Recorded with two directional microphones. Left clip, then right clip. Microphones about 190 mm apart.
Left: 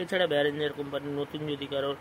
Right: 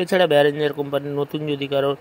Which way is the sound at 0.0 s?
45° right (ahead or behind).